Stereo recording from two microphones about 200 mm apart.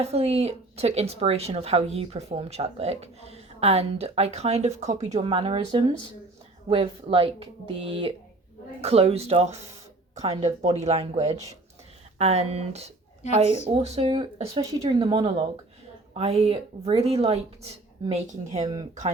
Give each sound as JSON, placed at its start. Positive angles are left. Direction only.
{"t": 0.0, "sound": "speech", "side_deg": -30}
{"t": 14.4, "sound": "speech", "side_deg": -15}